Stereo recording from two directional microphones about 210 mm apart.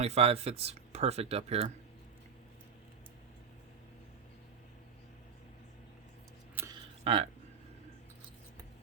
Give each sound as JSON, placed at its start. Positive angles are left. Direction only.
{"t": 0.0, "sound": "speech", "side_deg": -30}
{"t": 7.0, "sound": "speech", "side_deg": -30}